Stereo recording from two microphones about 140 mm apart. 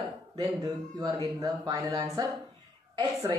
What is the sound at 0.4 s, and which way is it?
Speech, 25° right (ahead or behind).